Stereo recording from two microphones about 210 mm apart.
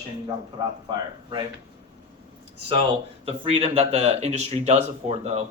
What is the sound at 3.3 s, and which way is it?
Speech, 30° right (ahead or behind).